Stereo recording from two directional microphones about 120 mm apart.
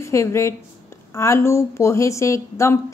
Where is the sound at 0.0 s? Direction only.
25° left (ahead or behind).